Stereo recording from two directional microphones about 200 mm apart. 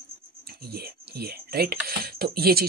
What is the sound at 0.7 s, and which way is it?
Speech, 50° right (ahead or behind).